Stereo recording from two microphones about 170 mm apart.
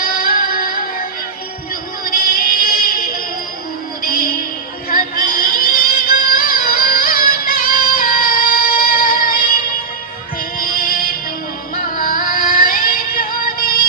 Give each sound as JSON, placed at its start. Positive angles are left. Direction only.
{"t": 0.2, "sound": "music", "side_deg": 55}
{"t": 2.0, "sound": "music", "side_deg": 55}
{"t": 10.6, "sound": "music", "side_deg": 60}